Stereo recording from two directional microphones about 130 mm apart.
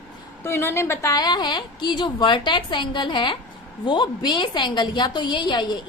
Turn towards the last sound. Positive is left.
turn(degrees=35)  # may be behind; listen again after turning